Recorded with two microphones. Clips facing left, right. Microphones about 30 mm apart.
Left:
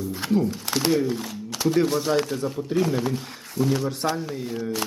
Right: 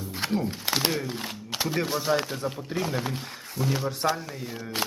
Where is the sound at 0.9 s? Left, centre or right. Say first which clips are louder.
Left 7 dB; centre.